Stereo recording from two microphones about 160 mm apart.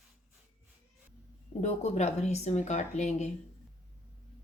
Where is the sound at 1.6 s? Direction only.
40° left (ahead or behind).